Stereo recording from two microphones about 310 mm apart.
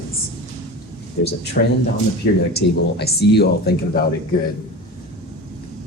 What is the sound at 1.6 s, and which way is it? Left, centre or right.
Speech, left.